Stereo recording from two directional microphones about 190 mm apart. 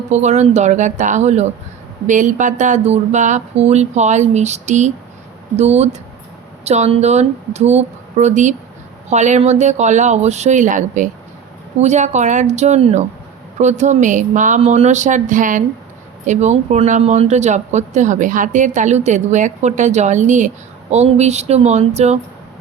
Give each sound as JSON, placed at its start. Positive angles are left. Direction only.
{"t": 0.1, "sound": "speech", "side_deg": -35}